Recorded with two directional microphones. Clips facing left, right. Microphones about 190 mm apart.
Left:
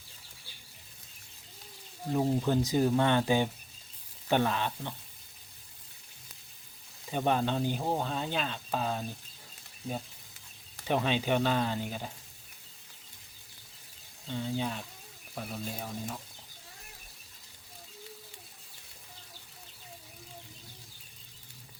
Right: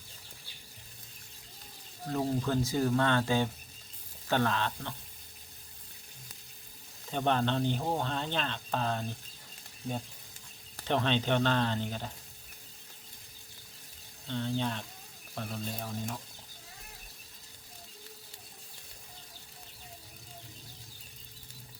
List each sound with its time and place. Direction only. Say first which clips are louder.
2.0 s speech: left 3 dB; 15° left (ahead or behind)
7.1 s speech: even; 10° left (ahead or behind)
10.8 s speech: even; 10° left (ahead or behind)
14.3 s speech: right 1 dB; 10° left (ahead or behind)